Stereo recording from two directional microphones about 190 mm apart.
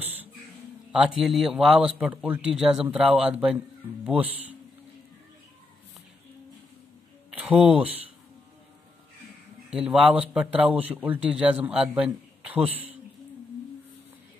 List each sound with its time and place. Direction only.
0.0 s a sound: 10° right (ahead or behind)
0.9 s a man's voice: centre (ahead or behind)
7.3 s speech: 5° right (ahead or behind)
9.7 s a man's voice: 5° right (ahead or behind)